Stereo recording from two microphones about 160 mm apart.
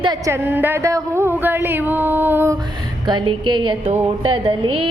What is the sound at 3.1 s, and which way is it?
A woman's voice, 30° right (ahead or behind).